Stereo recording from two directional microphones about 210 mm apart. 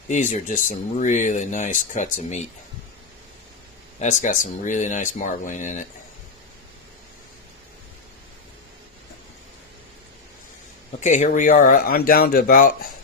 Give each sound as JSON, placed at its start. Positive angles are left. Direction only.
{"t": 0.1, "sound": "speech", "side_deg": 35}
{"t": 4.0, "sound": "speech", "side_deg": 35}
{"t": 11.0, "sound": "speech", "side_deg": 35}